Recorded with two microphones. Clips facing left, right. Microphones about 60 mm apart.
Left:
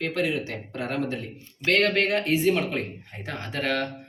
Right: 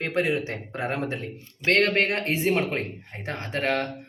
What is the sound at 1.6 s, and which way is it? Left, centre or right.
Speech, right.